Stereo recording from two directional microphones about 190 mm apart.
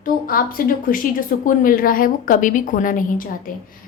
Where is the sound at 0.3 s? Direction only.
50° left (ahead or behind).